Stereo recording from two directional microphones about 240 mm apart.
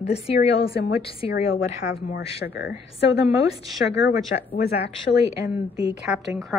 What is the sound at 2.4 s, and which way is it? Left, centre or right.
Speech, left.